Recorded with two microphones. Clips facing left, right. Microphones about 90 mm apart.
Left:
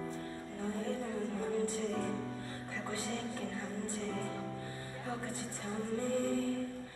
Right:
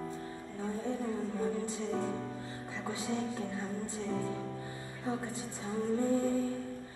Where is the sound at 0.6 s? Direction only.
20° right (ahead or behind).